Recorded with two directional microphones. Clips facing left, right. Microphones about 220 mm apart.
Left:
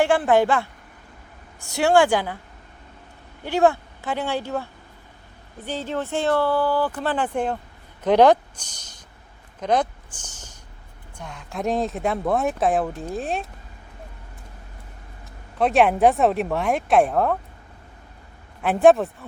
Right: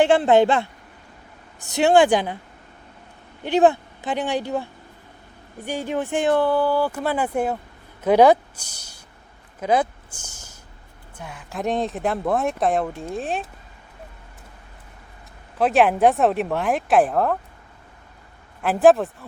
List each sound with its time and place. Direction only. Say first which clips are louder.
0.0 s a woman's voice: right 3 dB; 25° right (ahead or behind)
3.4 s speech: right 2 dB; 20° right (ahead or behind)
9.6 s a sound: right 1 dB; 5° right (ahead or behind)
11.2 s speech: even; 5° right (ahead or behind)
15.5 s speech: even; centre (ahead or behind)
18.6 s speech: even; centre (ahead or behind)